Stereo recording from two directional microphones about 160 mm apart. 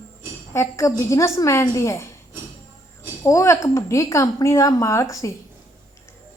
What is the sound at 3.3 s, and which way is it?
A woman's voice, 20° left (ahead or behind).